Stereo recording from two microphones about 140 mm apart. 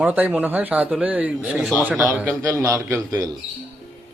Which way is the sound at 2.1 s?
15° right (ahead or behind).